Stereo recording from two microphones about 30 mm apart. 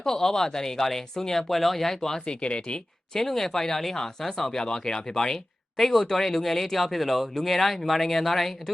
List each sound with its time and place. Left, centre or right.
0.0 s speech: centre
2.2 s speech: left
3.2 s speech: centre
4.6 s speech: left; by 8.7 s centre